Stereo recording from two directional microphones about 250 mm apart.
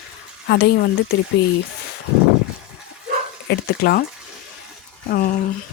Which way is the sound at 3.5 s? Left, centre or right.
Left.